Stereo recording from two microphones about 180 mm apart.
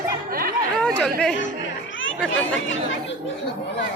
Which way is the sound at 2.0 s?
90° left.